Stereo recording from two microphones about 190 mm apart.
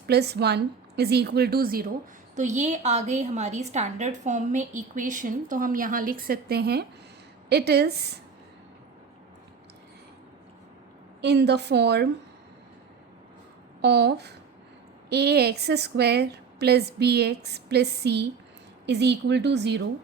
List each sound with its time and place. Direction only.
0.1 s a woman's voice: 60° right (ahead or behind)
2.3 s a woman's voice: 40° right (ahead or behind); by 7.9 s 60° right (ahead or behind)
11.2 s a woman's voice: 60° right (ahead or behind)
13.8 s a woman's voice: 60° right (ahead or behind)